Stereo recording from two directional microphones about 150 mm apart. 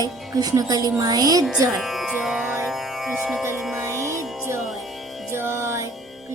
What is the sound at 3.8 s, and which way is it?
Music, 20° right (ahead or behind).